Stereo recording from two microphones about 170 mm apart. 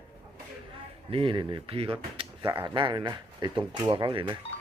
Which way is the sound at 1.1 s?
30° right (ahead or behind).